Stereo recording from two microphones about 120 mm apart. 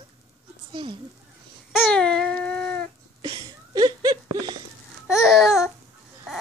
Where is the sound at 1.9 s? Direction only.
5° left (ahead or behind).